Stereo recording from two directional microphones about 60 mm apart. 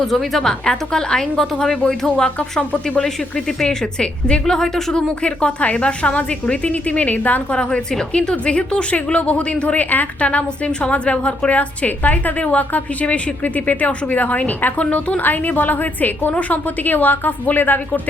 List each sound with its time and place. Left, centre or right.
0.0 s a woman's voice: centre; by 7.4 s left
7.5 s a woman's voice: centre; by 18.0 s left